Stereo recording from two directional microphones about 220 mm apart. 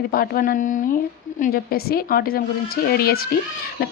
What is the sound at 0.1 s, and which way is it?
A woman's voice, 40° left (ahead or behind).